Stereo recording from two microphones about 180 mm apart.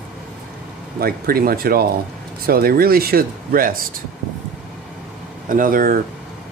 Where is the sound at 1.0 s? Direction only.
55° right (ahead or behind).